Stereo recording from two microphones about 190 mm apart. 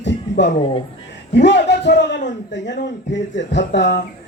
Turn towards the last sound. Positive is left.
turn(degrees=65)  # may be behind; listen again after turning